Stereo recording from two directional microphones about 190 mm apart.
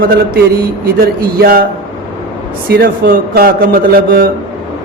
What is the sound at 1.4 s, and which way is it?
Speech, 50° right (ahead or behind).